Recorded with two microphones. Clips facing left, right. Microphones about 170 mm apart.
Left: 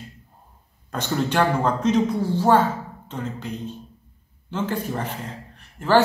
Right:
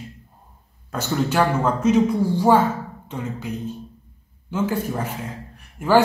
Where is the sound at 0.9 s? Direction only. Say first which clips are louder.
Right 1 dB; 5° right (ahead or behind).